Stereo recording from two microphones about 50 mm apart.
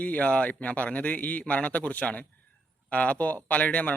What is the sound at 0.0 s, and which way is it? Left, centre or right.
A man's voice, left.